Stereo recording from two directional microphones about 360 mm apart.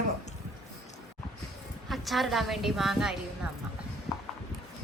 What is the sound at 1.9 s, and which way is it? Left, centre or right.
Speech, centre.